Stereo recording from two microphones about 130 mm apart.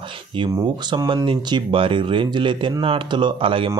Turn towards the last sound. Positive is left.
turn(degrees=-40)  # may be behind; listen again after turning